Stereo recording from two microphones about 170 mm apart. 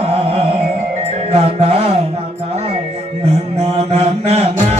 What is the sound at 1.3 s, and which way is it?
Music, 40° right (ahead or behind).